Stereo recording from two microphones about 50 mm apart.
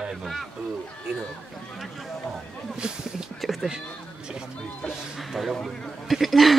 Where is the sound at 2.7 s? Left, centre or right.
Centre.